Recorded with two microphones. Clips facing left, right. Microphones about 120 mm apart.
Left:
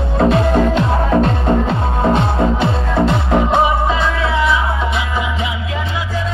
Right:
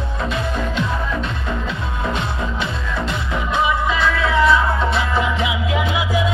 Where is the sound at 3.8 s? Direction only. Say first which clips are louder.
Left 2 dB; 25° left (ahead or behind).